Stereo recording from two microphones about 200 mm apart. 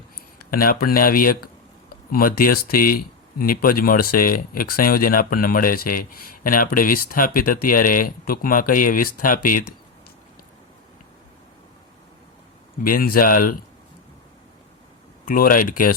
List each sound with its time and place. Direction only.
0.5 s speech: 45° left (ahead or behind)
12.8 s speech: 45° left (ahead or behind)
15.3 s speech: 45° left (ahead or behind)